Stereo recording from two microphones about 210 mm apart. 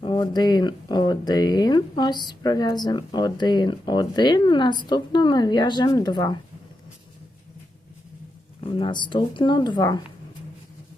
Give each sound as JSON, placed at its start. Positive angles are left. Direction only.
{"t": 0.0, "sound": "speech", "side_deg": 20}
{"t": 8.8, "sound": "speech", "side_deg": 20}